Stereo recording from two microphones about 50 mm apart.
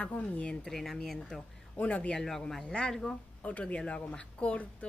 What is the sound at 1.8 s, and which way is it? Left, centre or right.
Speech, left.